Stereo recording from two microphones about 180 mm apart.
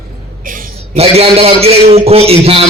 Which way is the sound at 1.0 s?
35° right (ahead or behind).